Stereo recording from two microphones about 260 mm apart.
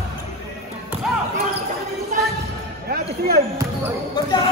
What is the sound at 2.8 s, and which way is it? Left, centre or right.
Speech, right.